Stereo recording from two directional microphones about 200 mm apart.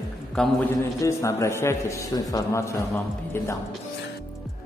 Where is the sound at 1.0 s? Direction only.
15° left (ahead or behind).